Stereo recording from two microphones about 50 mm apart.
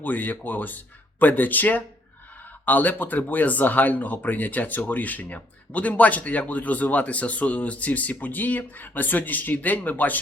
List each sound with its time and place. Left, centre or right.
0.0 s speech: left